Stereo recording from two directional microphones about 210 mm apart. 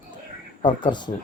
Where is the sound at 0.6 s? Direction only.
20° left (ahead or behind).